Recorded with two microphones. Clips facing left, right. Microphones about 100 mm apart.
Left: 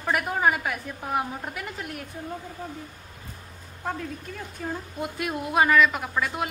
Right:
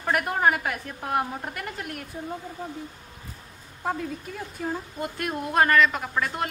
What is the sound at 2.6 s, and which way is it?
Speech, 20° right (ahead or behind).